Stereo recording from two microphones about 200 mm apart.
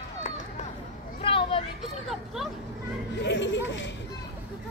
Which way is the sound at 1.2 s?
25° left (ahead or behind).